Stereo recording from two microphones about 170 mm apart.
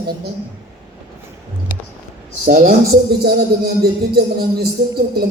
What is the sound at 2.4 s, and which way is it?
Speech, 45° right (ahead or behind).